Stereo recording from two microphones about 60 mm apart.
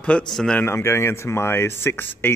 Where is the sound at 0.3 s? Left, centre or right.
Centre.